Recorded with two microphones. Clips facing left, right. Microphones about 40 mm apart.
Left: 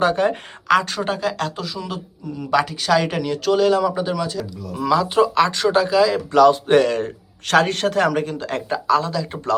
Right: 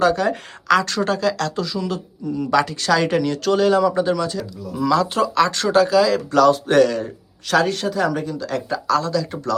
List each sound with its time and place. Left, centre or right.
0.0 s speech: left
6.9 s speech: left
8.9 s speech: centre